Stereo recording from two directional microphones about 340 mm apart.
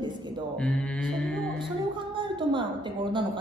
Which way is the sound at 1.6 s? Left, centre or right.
Centre.